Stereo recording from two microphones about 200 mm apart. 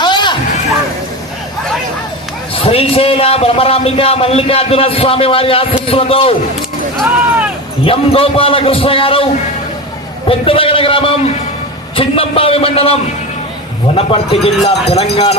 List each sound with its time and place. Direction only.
0.0 s a sound: 20° left (ahead or behind)
2.6 s speech: 30° left (ahead or behind)
7.9 s a man's voice: 25° left (ahead or behind)